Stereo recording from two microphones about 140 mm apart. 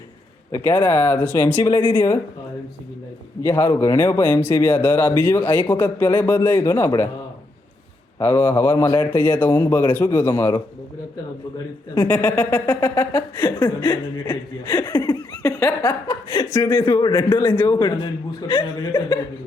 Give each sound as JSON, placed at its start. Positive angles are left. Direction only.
{"t": 0.5, "sound": "speech", "side_deg": 15}
{"t": 3.4, "sound": "speech", "side_deg": 20}
{"t": 8.2, "sound": "speech", "side_deg": 15}
{"t": 12.0, "sound": "speech", "side_deg": 10}
{"t": 14.9, "sound": "laughter", "side_deg": 25}
{"t": 16.5, "sound": "speech", "side_deg": 20}